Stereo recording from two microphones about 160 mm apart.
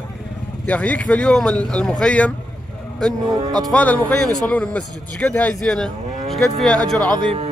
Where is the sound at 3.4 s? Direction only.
25° right (ahead or behind).